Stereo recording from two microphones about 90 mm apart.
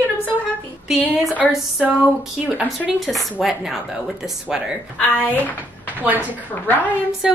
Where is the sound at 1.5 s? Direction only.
10° right (ahead or behind).